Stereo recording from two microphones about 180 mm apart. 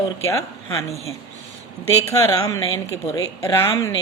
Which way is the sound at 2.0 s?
20° left (ahead or behind).